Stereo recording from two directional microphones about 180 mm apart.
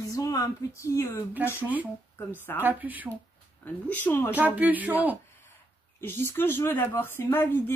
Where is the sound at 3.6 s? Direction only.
10° left (ahead or behind).